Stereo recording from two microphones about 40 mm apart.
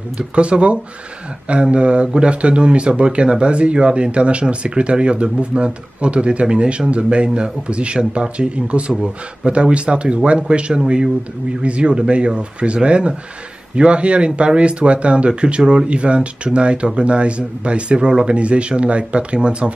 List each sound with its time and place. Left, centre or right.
0.4 s speech: right
8.9 s speech: centre
9.5 s speech: right